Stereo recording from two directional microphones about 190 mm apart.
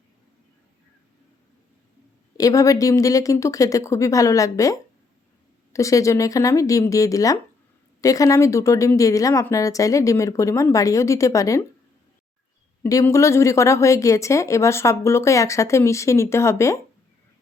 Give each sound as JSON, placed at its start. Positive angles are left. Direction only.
{"t": 2.4, "sound": "a woman's voice", "side_deg": 15}
{"t": 12.8, "sound": "a woman's voice", "side_deg": 15}